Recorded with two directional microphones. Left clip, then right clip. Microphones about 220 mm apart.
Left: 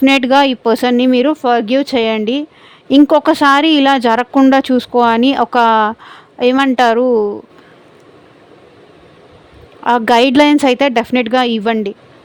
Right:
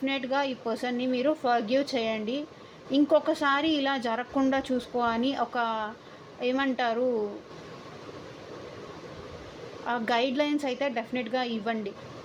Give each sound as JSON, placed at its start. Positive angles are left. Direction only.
{"t": 0.0, "sound": "speech", "side_deg": 55}
{"t": 9.8, "sound": "speech", "side_deg": 55}